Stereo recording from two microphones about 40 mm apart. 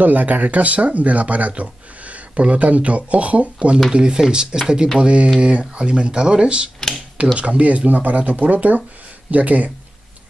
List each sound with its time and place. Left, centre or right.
0.0 s speech: right
3.9 s speech: centre; by 9.7 s right